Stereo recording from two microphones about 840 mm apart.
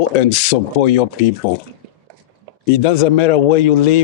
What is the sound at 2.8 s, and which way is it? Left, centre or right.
A man's voice, left.